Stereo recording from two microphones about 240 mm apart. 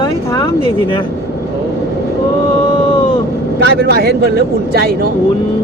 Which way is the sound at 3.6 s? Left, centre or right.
Right.